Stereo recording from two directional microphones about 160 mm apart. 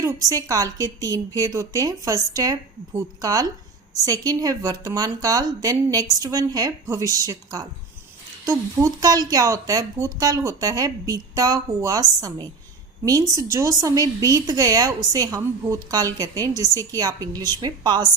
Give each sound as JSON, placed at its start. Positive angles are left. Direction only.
{"t": 0.0, "sound": "a woman's voice", "side_deg": -20}